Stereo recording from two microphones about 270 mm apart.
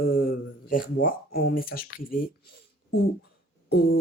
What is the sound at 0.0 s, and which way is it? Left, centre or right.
Speech, left.